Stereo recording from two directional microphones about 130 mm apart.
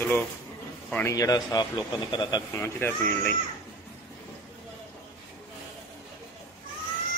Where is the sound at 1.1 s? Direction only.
30° left (ahead or behind).